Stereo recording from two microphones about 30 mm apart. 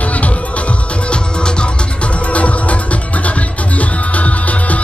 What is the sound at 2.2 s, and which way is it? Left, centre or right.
Music, left.